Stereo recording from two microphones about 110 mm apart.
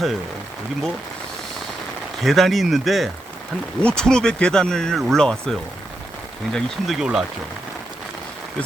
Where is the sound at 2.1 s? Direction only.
Centre (ahead or behind).